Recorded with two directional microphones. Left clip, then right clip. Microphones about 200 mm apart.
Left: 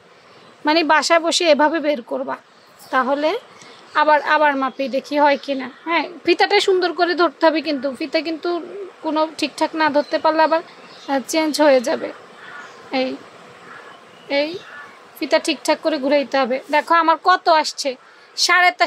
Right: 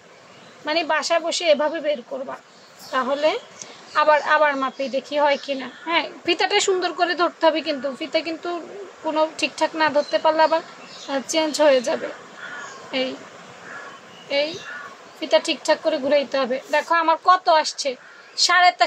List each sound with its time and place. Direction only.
0.7 s a woman's voice: 35° left (ahead or behind)
14.3 s a woman's voice: 30° left (ahead or behind)